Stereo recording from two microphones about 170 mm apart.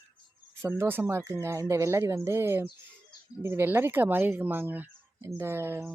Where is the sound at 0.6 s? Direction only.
15° right (ahead or behind).